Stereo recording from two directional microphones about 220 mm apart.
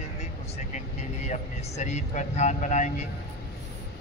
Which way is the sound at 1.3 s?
30° left (ahead or behind).